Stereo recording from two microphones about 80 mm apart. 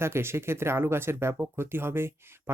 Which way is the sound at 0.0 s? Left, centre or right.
Right.